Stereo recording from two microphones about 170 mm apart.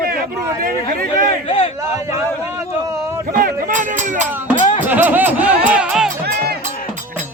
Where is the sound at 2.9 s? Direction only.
15° right (ahead or behind).